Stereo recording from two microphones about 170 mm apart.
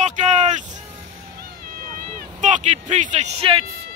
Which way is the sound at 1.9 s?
50° right (ahead or behind).